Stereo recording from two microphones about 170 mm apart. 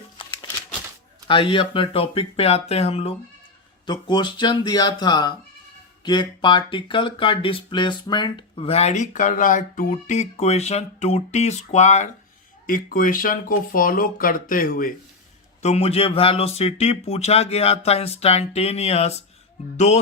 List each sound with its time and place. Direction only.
1.3 s speech: 30° left (ahead or behind)
12.6 s speech: 55° left (ahead or behind)
15.6 s speech: 40° left (ahead or behind)